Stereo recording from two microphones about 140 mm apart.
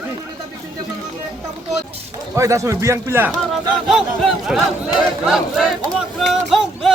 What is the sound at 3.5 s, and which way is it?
Speech, centre (ahead or behind).